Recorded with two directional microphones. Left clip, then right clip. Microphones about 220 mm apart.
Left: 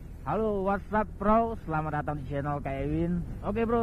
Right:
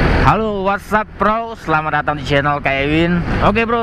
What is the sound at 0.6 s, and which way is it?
Speech, 10° right (ahead or behind).